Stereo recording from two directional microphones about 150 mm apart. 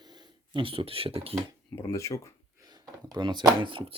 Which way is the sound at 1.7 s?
20° left (ahead or behind).